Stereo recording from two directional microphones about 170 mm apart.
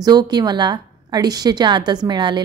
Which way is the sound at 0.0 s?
25° right (ahead or behind).